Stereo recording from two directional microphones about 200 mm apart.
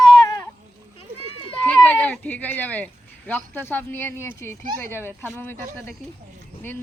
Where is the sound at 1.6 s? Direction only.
10° left (ahead or behind).